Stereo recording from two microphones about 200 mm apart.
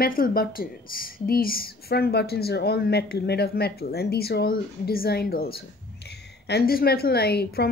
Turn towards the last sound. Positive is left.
turn(degrees=55)  # may be behind; listen again after turning